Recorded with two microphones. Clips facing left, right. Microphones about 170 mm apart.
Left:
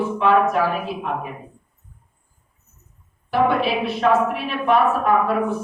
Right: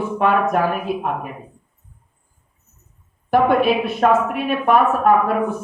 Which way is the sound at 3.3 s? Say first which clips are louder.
Right 4 dB; 50° right (ahead or behind).